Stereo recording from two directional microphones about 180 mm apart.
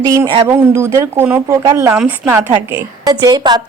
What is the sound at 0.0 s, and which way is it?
A woman's voice, 20° right (ahead or behind).